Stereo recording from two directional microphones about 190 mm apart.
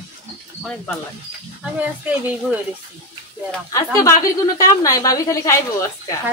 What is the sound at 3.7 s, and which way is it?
A woman's voice, 15° left (ahead or behind).